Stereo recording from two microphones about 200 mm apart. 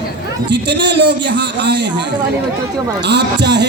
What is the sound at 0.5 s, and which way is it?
A man's voice, 60° right (ahead or behind).